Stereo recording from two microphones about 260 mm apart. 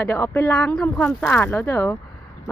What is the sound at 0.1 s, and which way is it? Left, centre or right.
A woman's voice, centre.